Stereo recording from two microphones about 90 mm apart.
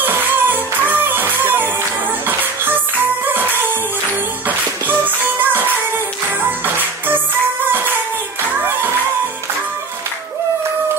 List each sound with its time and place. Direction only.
0.0 s music: 20° right (ahead or behind)